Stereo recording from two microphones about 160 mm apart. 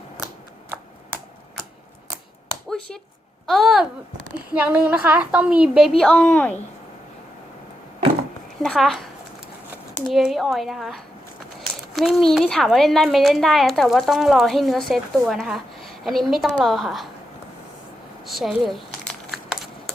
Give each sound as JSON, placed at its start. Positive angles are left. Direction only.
{"t": 3.4, "sound": "a woman's voice", "side_deg": 0}
{"t": 6.0, "sound": "speech", "side_deg": 5}
{"t": 8.6, "sound": "a woman's voice", "side_deg": 0}
{"t": 10.1, "sound": "a woman's voice", "side_deg": 0}
{"t": 18.3, "sound": "crumpling", "side_deg": 0}